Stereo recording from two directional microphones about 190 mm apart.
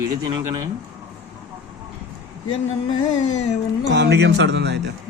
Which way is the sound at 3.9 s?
65° right (ahead or behind).